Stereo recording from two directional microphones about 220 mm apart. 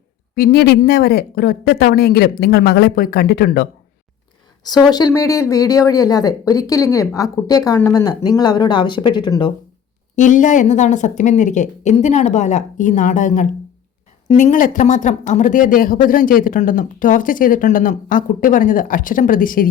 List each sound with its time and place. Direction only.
0.3 s speech: 45° left (ahead or behind)
4.9 s speech: 15° left (ahead or behind)
10.2 s speech: 35° left (ahead or behind)